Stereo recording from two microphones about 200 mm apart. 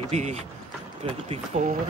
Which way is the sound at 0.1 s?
35° right (ahead or behind).